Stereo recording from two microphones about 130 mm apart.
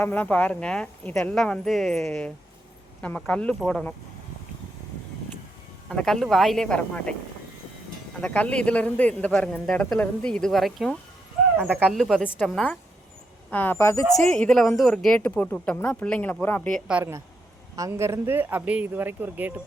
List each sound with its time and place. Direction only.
0.0 s a man's voice: 15° left (ahead or behind)
5.9 s speech: 5° left (ahead or behind)
8.2 s a man's voice: 10° left (ahead or behind)
11.5 s speech: 15° right (ahead or behind)
11.8 s speech: 5° left (ahead or behind)
13.5 s a man's voice: 15° left (ahead or behind)
14.3 s a man's voice: 5° left (ahead or behind)
16.9 s speech: 20° right (ahead or behind)